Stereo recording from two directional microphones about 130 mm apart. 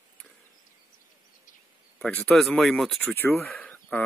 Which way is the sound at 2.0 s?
10° left (ahead or behind).